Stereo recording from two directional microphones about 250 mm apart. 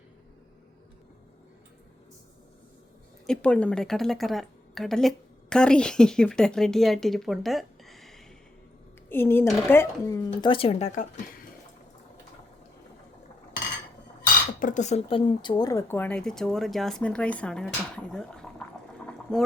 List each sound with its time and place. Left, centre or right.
3.2 s a woman's voice: centre
10.4 s speech: left
14.6 s speech: left; by 19.4 s centre